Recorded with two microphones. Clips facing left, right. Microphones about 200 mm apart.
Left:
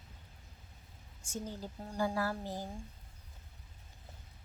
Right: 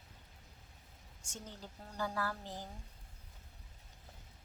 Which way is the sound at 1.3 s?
10° left (ahead or behind).